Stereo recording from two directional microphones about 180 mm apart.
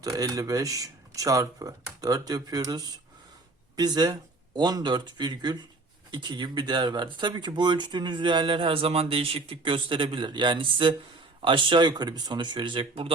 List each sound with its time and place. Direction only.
0.0 s speech: 20° right (ahead or behind)